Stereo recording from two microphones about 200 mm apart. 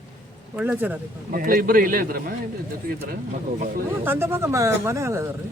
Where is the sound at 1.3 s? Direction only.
45° right (ahead or behind).